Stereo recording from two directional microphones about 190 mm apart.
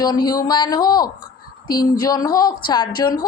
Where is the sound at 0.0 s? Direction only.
20° left (ahead or behind).